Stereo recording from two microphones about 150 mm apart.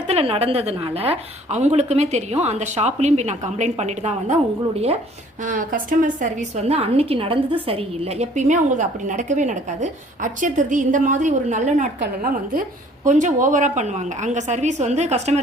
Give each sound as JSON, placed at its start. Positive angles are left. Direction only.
{"t": 0.1, "sound": "a woman's voice", "side_deg": -40}
{"t": 5.4, "sound": "a woman's voice", "side_deg": -60}
{"t": 13.1, "sound": "a woman's voice", "side_deg": -55}